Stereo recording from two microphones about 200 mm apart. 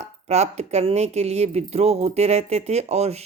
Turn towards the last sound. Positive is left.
turn(degrees=-30)  # may be behind; listen again after turning